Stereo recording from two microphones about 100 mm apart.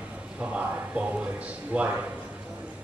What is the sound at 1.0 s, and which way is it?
Speech, 15° right (ahead or behind).